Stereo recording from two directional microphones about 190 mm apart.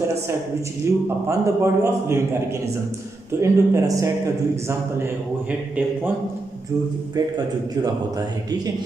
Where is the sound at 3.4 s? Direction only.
15° right (ahead or behind).